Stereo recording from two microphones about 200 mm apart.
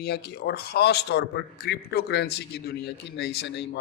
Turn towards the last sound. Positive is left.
turn(degrees=55)  # may be behind; listen again after turning